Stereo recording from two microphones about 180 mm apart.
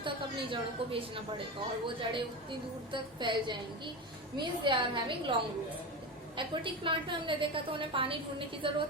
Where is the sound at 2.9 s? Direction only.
25° right (ahead or behind).